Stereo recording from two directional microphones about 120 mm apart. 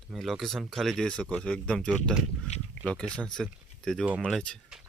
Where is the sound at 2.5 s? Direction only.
65° left (ahead or behind).